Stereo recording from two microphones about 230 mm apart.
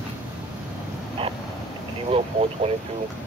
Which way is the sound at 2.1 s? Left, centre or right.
Right.